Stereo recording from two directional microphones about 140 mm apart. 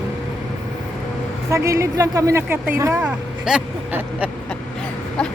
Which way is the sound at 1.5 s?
20° right (ahead or behind).